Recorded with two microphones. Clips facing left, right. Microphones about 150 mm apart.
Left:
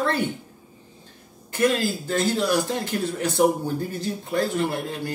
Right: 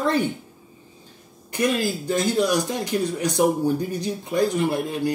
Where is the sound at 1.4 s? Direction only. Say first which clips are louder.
Left 1 dB; 15° right (ahead or behind).